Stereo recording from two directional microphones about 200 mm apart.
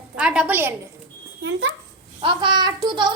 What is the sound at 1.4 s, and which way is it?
Speech, 65° right (ahead or behind).